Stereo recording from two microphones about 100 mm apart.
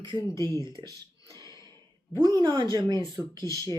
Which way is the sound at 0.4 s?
40° right (ahead or behind).